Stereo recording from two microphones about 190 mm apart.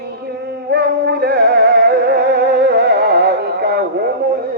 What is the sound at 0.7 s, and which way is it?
Music, 60° right (ahead or behind).